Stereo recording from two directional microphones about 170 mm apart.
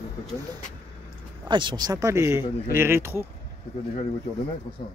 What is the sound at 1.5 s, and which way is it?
Speech, 25° right (ahead or behind).